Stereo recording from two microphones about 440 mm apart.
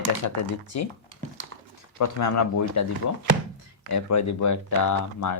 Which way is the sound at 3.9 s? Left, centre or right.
Left.